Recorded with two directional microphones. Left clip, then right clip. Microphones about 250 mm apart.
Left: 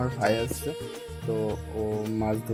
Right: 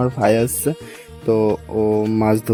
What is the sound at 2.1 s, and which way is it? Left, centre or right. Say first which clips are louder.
Speech: right 11 dB; right.